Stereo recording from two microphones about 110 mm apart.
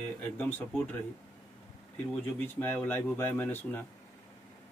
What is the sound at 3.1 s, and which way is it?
Speech, 20° left (ahead or behind).